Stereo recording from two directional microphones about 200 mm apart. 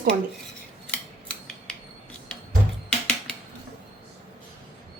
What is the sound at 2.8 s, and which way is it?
Music, 5° left (ahead or behind).